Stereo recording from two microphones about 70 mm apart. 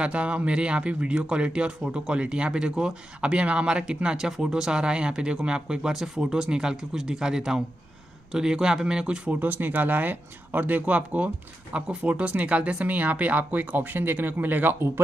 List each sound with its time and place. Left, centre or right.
0.0 s speech: centre
9.3 s speech: right